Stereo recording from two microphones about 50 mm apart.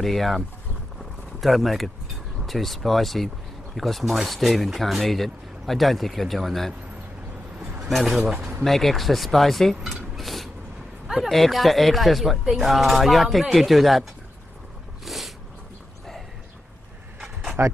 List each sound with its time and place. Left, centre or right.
0.0 s speech: centre
1.4 s speech: centre
7.9 s speech: centre
9.9 s a sound: centre
11.1 s speech: centre
15.0 s a sound: centre
17.6 s speech: right